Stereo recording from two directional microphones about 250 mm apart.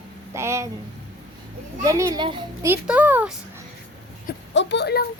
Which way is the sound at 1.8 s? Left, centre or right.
Centre.